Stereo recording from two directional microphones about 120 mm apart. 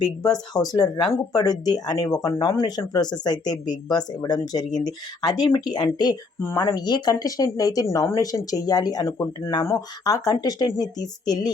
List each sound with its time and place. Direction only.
0.0 s speech: 35° left (ahead or behind)
6.4 s speech: 25° left (ahead or behind)